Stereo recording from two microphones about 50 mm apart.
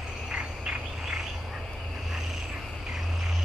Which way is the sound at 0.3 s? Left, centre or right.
Centre.